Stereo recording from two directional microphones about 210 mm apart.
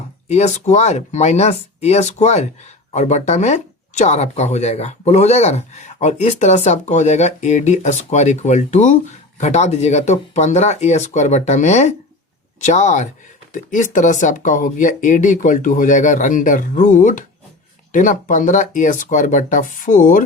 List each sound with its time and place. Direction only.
0.3 s speech: 35° left (ahead or behind)